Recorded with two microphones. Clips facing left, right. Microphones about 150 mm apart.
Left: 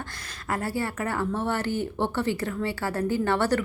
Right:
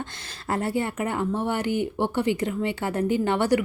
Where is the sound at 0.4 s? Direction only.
25° right (ahead or behind).